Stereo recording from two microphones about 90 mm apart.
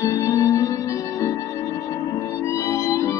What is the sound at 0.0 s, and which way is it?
Music, 35° left (ahead or behind).